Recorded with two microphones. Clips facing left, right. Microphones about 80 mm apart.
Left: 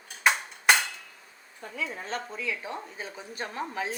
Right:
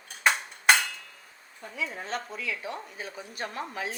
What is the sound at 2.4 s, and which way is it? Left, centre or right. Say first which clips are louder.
A woman's voice: left 1 dB; left.